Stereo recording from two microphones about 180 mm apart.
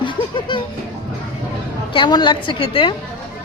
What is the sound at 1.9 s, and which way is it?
A woman's voice, 25° left (ahead or behind).